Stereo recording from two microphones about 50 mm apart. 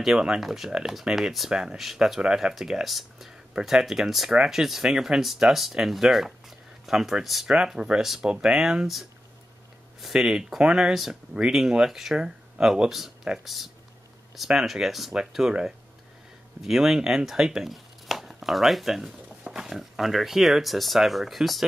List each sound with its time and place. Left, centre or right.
0.0 s speech: centre
1.8 s speech: centre
7.4 s speech: centre
10.2 s speech: centre
15.4 s speech: centre
16.6 s speech: centre
19.2 s speech: centre